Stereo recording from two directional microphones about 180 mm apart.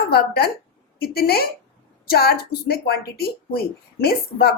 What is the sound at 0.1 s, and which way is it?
Speech, 60° left (ahead or behind).